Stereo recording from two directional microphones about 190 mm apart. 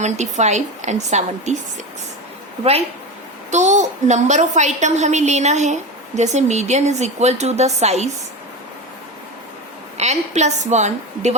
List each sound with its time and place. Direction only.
0.0 s a woman's voice: 35° right (ahead or behind)
3.5 s a woman's voice: 40° right (ahead or behind)
10.0 s a woman's voice: 35° right (ahead or behind)